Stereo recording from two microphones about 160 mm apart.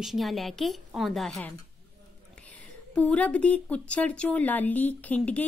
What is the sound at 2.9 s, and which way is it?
Speech, 5° left (ahead or behind).